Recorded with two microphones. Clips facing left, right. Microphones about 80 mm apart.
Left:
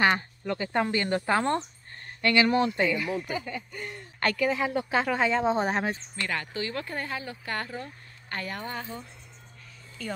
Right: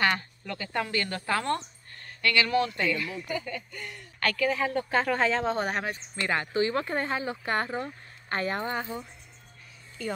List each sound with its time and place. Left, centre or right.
0.0 s speech: left; by 5.5 s centre
5.5 s speech: left
6.2 s speech: right
10.0 s speech: centre